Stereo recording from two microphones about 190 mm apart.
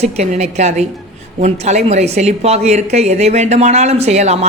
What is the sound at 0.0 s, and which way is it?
Speech, 35° right (ahead or behind).